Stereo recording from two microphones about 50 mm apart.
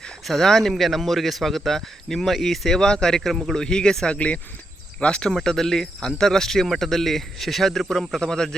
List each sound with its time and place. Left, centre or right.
0.3 s speech: centre
3.6 s speech: centre
5.3 s speech: centre